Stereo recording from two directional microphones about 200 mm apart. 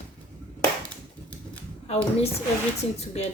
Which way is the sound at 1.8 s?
30° left (ahead or behind).